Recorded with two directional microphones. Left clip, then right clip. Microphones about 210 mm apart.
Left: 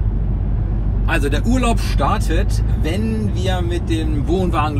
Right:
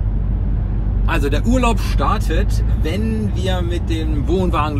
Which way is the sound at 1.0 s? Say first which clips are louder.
Even; 15° right (ahead or behind).